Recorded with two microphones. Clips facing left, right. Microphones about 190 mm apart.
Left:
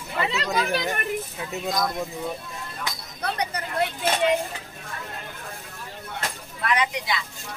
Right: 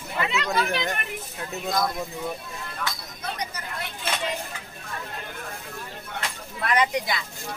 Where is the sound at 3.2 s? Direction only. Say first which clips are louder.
Left 5 dB; 65° left (ahead or behind).